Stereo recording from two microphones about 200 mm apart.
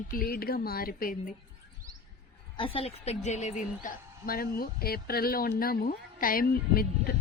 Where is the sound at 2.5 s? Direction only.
30° left (ahead or behind).